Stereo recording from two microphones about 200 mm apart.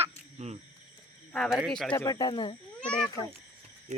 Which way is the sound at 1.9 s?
15° left (ahead or behind).